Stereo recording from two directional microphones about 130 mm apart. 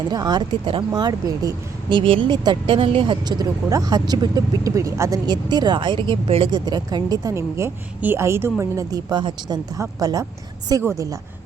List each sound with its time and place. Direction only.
0.0 s speech: 30° right (ahead or behind)
6.7 s a woman's voice: 30° right (ahead or behind)